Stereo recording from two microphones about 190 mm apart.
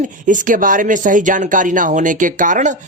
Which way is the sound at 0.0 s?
45° right (ahead or behind).